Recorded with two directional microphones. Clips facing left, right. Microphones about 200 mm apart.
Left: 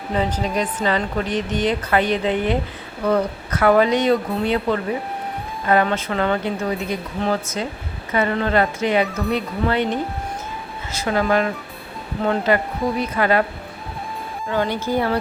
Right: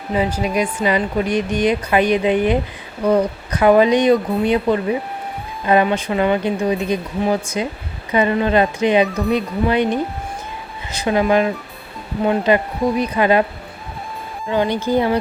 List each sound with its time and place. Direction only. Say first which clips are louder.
0.1 s a woman's voice: right 3 dB; 10° right (ahead or behind)
14.4 s a woman's voice: right 4 dB; 15° right (ahead or behind)